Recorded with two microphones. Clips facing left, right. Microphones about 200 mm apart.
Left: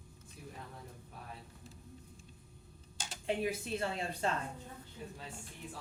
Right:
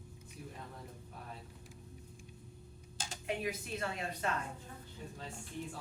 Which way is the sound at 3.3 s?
30° left (ahead or behind).